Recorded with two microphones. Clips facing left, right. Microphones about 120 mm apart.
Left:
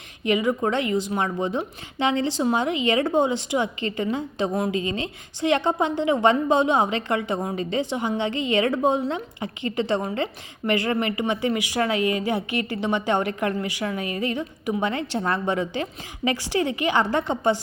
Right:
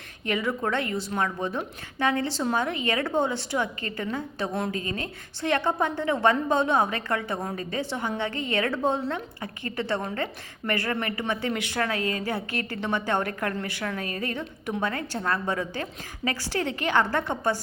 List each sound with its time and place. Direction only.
0.3 s speech: 15° left (ahead or behind)